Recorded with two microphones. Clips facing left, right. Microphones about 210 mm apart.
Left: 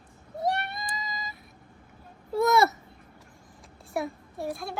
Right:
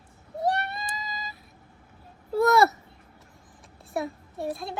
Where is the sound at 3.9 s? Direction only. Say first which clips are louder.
Right 1 dB; centre (ahead or behind).